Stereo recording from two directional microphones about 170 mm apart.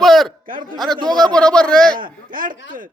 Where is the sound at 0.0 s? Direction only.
Centre (ahead or behind).